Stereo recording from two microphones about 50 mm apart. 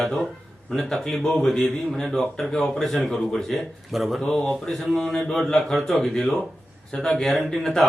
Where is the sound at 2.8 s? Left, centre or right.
Centre.